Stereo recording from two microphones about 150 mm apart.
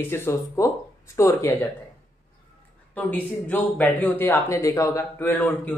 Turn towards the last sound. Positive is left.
turn(degrees=15)  # may be behind; listen again after turning